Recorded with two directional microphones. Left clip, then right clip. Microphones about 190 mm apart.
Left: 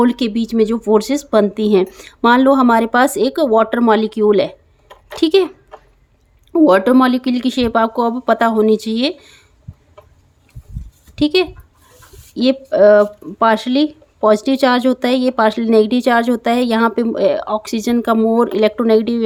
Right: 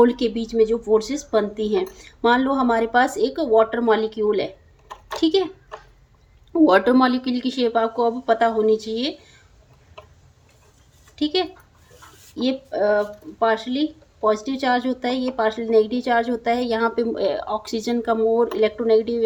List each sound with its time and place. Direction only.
0.0 s speech: 40° left (ahead or behind)
6.5 s speech: 30° left (ahead or behind)
11.1 s speech: 45° left (ahead or behind)